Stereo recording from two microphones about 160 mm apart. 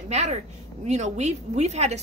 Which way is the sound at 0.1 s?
45° right (ahead or behind).